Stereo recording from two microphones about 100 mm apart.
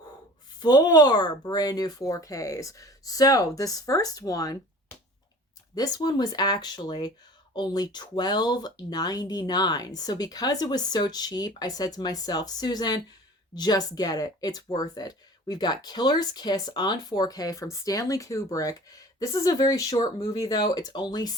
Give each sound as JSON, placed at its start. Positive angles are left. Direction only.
{"t": 0.6, "sound": "speech", "side_deg": 40}
{"t": 5.7, "sound": "speech", "side_deg": 40}